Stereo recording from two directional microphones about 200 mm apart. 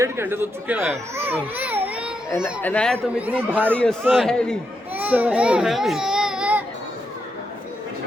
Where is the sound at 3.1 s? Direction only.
5° right (ahead or behind).